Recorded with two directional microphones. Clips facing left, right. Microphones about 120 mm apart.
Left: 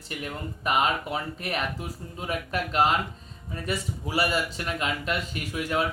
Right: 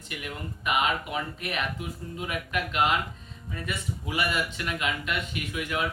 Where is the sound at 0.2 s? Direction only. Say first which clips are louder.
Left 4 dB; 35° left (ahead or behind).